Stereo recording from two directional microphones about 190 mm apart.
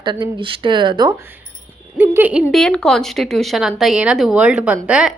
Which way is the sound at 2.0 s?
10° right (ahead or behind).